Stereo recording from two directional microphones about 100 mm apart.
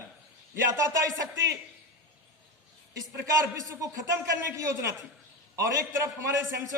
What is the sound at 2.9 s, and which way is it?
A woman's voice, 35° right (ahead or behind).